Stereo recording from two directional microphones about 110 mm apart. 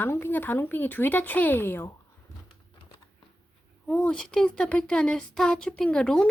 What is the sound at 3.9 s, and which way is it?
Speech, 5° left (ahead or behind).